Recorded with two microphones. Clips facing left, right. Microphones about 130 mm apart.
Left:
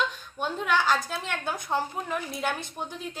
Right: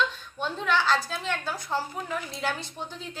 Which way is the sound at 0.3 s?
10° left (ahead or behind).